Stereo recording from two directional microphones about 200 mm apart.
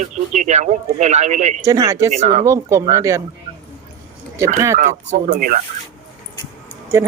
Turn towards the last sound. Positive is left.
turn(degrees=-15)  # may be behind; listen again after turning